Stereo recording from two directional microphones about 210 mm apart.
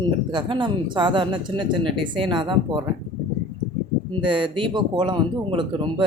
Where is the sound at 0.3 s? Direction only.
20° right (ahead or behind).